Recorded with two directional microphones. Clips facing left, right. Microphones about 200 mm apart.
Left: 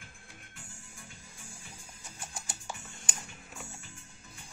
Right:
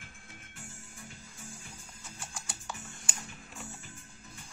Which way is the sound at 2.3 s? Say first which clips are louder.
Left 1 dB; 15° left (ahead or behind).